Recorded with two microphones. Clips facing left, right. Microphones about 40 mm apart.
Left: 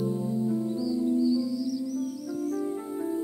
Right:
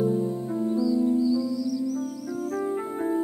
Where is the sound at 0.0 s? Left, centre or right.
Right.